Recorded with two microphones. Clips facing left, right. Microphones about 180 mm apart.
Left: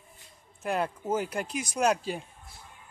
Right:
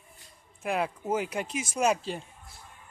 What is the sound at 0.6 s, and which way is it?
Speech, 5° right (ahead or behind).